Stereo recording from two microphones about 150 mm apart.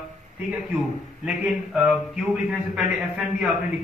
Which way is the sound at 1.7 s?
5° right (ahead or behind).